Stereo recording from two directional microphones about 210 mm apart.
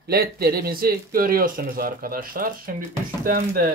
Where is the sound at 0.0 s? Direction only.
45° right (ahead or behind).